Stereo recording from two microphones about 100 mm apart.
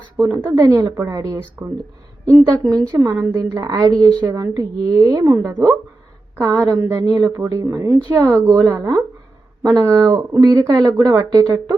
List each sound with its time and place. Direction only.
0.4 s speech: 30° right (ahead or behind)